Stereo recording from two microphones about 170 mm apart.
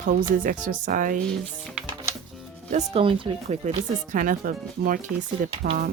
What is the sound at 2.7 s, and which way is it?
Speech, 35° right (ahead or behind).